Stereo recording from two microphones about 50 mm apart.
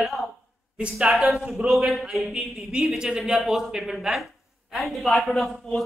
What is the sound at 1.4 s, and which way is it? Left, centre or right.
A woman's voice, centre.